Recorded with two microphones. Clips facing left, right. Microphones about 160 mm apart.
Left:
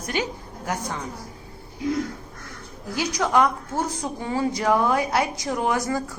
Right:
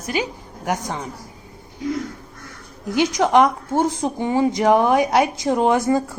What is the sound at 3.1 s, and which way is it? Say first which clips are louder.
A woman's voice: right 4 dB; 20° right (ahead or behind).